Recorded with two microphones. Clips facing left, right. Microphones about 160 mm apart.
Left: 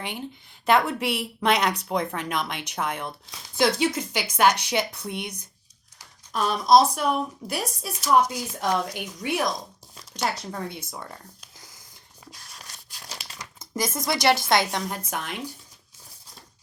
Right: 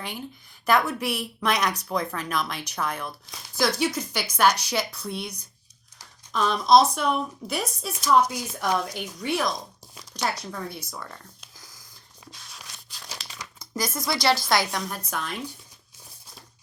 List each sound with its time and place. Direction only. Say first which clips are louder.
0.0 s a woman's voice: left 2 dB; 20° left (ahead or behind)
6.3 s speech: even; 10° left (ahead or behind)
10.3 s a woman's voice: left 1 dB; 25° left (ahead or behind)
10.9 s a sound: left 1 dB; 20° left (ahead or behind)
12.3 s a sound: even; centre (ahead or behind)
13.7 s a woman's voice: left 1 dB; 20° left (ahead or behind)